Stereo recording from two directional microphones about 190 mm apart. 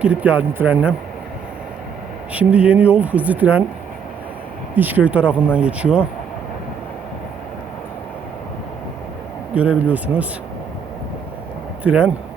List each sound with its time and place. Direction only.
0.0 s speech: 5° right (ahead or behind)
2.3 s speech: 5° right (ahead or behind)
4.7 s speech: 10° right (ahead or behind)
9.6 s speech: 5° right (ahead or behind)
11.8 s speech: 5° right (ahead or behind)